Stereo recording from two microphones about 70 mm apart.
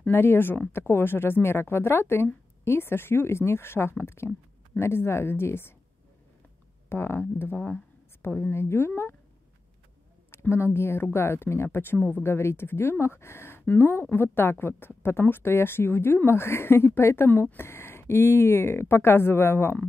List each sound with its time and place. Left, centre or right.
0.1 s speech: left
6.9 s speech: left
10.4 s speech: left